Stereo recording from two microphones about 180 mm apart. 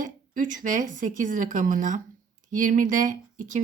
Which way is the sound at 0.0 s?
45° right (ahead or behind).